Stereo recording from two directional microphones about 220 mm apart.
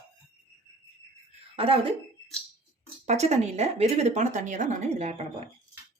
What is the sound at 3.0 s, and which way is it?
Speech, 30° right (ahead or behind).